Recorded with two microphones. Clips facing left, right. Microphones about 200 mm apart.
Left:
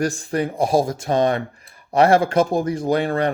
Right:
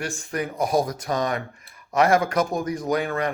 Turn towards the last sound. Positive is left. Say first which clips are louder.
# left 5 dB
turn(degrees=30)  # may be behind; listen again after turning